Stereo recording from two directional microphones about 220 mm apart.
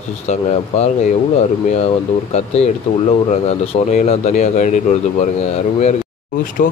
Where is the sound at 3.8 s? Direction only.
30° left (ahead or behind).